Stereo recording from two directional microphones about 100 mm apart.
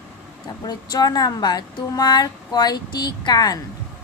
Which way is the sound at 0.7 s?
40° left (ahead or behind).